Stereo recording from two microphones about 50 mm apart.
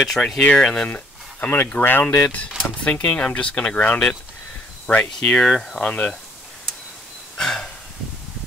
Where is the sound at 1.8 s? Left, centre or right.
Left.